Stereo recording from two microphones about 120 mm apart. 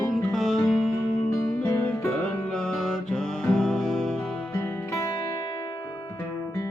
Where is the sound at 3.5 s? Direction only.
Centre (ahead or behind).